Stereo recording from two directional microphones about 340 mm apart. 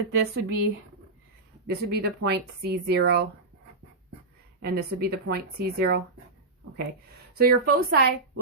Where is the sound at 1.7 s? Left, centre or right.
Right.